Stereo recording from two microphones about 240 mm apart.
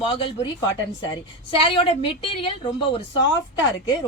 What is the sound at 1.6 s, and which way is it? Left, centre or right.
Speech, left.